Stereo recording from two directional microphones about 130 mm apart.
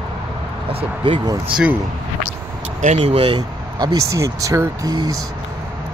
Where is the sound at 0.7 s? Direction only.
45° right (ahead or behind).